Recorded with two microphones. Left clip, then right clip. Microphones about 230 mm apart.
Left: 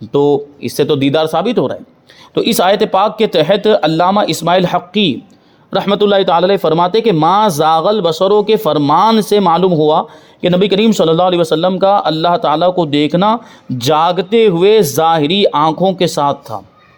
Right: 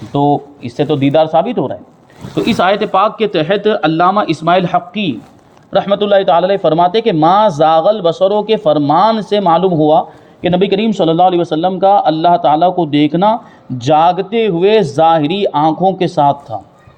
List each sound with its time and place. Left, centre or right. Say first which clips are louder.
0.1 s speech: left 1 dB; left